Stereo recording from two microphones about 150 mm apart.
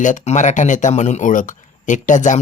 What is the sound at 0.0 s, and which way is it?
Speech, 55° left (ahead or behind).